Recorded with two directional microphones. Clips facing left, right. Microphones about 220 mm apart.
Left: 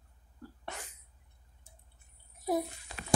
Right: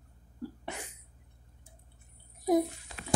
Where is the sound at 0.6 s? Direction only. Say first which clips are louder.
Right 3 dB; 15° right (ahead or behind).